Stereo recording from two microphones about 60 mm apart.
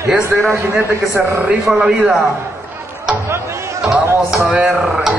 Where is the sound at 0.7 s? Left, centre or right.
Right.